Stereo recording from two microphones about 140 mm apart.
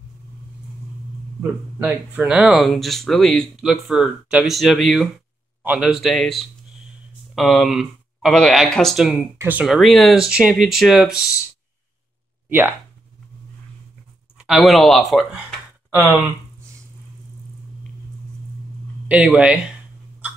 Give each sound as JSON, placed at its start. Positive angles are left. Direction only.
{"t": 1.4, "sound": "speech", "side_deg": -10}
{"t": 9.7, "sound": "speech", "side_deg": 0}
{"t": 12.4, "sound": "speech", "side_deg": -15}
{"t": 14.4, "sound": "speech", "side_deg": 0}
{"t": 19.0, "sound": "a sound", "side_deg": -10}